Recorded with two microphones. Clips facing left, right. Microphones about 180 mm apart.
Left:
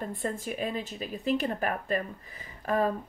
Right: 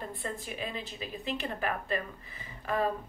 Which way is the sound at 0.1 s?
45° left (ahead or behind).